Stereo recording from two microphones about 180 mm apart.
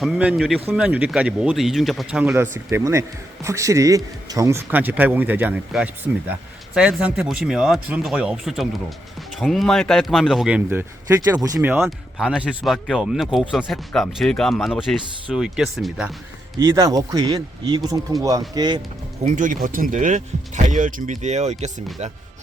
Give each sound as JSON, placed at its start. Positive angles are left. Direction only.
{"t": 0.0, "sound": "speech", "side_deg": -5}
{"t": 11.8, "sound": "speech", "side_deg": 0}
{"t": 16.6, "sound": "speech", "side_deg": -20}
{"t": 19.2, "sound": "speech", "side_deg": -45}